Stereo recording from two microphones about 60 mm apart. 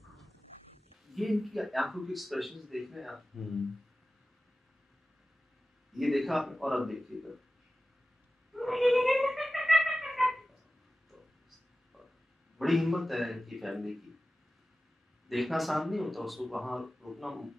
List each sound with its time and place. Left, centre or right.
0.0 s a sound: centre
1.1 s speech: centre
5.9 s speech: centre
8.5 s music: centre
12.5 s speech: centre
15.2 s speech: centre